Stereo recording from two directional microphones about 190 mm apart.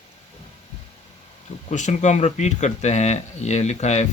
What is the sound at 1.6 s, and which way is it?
Speech, 40° left (ahead or behind).